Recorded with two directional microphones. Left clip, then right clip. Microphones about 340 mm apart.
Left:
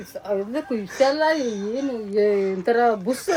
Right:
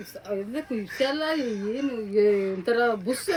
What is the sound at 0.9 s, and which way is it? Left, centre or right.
Speech, centre.